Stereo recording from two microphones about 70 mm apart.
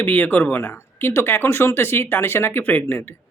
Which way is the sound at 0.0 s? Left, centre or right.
Left.